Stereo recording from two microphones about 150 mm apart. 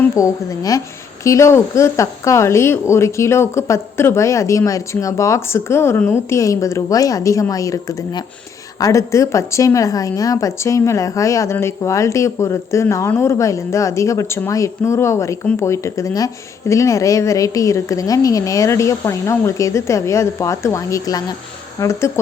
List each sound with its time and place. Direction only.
0.2 s speech: 20° left (ahead or behind)